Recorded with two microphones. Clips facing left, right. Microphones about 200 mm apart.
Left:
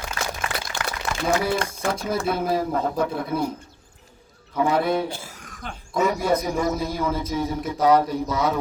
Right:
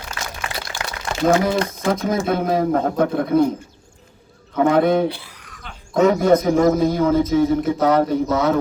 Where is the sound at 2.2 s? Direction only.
55° right (ahead or behind).